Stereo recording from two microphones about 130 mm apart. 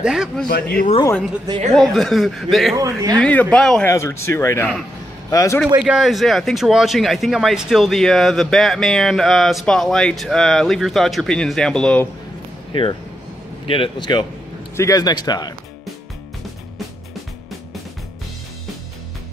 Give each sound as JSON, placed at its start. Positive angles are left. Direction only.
{"t": 0.0, "sound": "speech", "side_deg": -5}
{"t": 1.7, "sound": "speech", "side_deg": 0}
{"t": 2.8, "sound": "speech", "side_deg": -25}
{"t": 3.2, "sound": "speech", "side_deg": 10}
{"t": 3.8, "sound": "speech", "side_deg": 20}
{"t": 5.8, "sound": "speech", "side_deg": -5}
{"t": 12.7, "sound": "speech", "side_deg": 40}
{"t": 14.8, "sound": "speech", "side_deg": 25}